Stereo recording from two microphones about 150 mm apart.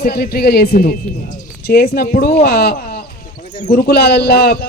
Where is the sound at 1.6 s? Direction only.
90° left.